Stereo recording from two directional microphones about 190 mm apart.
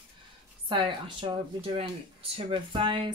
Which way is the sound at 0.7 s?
25° right (ahead or behind).